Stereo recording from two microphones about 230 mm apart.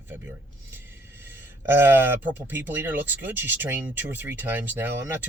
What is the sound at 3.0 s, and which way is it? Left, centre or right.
Speech, centre.